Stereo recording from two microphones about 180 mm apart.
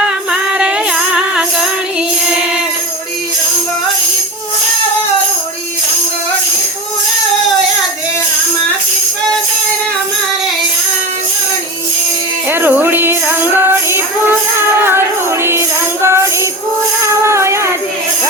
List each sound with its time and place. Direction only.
0.3 s music: 5° right (ahead or behind)
12.5 s music: 10° right (ahead or behind)